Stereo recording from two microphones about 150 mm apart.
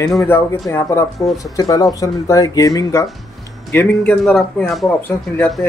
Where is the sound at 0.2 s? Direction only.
15° left (ahead or behind).